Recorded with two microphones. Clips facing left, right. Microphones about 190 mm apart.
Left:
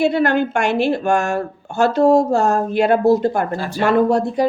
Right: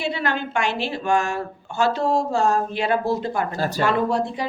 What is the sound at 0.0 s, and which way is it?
Speech, 50° left (ahead or behind).